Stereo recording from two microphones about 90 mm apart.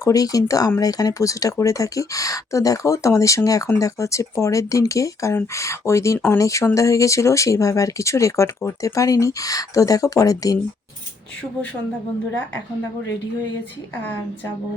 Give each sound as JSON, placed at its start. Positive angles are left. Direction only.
{"t": 0.0, "sound": "speech", "side_deg": 40}
{"t": 6.4, "sound": "speech", "side_deg": 35}